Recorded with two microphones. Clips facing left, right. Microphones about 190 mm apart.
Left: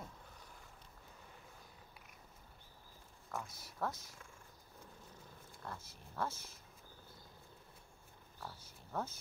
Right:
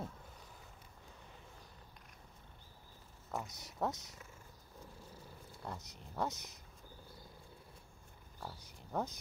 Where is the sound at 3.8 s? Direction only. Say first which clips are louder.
Right 3 dB; 20° right (ahead or behind).